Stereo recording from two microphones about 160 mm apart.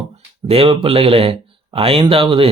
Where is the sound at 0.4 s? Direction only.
35° right (ahead or behind).